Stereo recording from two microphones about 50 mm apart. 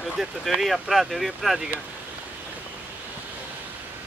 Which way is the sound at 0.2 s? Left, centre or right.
Centre.